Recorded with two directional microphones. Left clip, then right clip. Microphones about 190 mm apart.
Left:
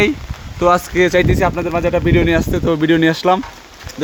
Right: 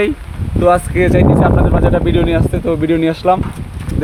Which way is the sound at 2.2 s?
25° left (ahead or behind).